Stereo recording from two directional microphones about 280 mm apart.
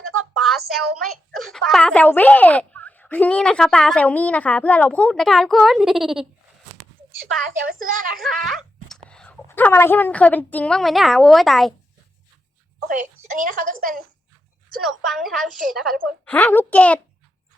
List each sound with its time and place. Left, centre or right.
0.0 s a sound: right
0.3 s a woman's voice: centre
8.2 s a woman's voice: centre
13.4 s a woman's voice: right
14.8 s a woman's voice: centre